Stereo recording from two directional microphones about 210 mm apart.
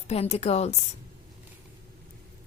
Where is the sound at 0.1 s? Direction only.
30° left (ahead or behind).